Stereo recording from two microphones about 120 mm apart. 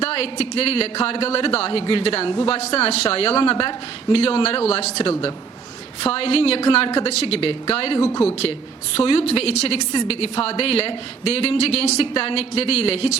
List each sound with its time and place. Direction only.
0.0 s a man's voice: 55° left (ahead or behind)
9.0 s a man's voice: 50° left (ahead or behind)